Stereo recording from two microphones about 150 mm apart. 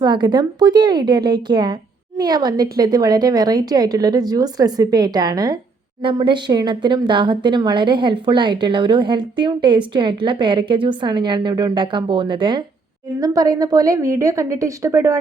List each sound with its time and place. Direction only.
0.0 s speech: 30° right (ahead or behind)